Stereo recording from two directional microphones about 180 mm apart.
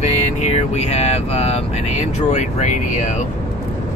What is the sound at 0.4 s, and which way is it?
Speech, 35° left (ahead or behind).